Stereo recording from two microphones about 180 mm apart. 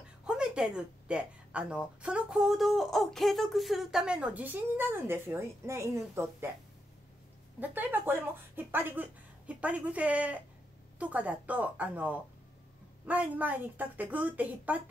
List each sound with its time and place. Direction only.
0.2 s speech: 5° right (ahead or behind)
7.6 s speech: 10° right (ahead or behind)